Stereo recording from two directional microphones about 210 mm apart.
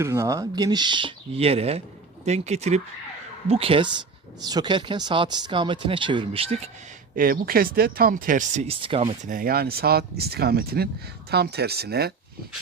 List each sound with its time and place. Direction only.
0.0 s speech: 15° right (ahead or behind)
7.2 s speech: 45° right (ahead or behind); by 9.1 s 25° right (ahead or behind)
9.2 s speech: 40° right (ahead or behind)